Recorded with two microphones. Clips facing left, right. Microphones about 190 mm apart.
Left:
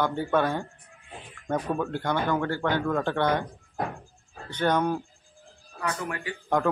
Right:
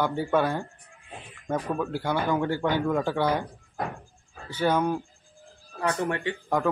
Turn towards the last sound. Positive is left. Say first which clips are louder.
# even
turn(degrees=-5)  # may be behind; listen again after turning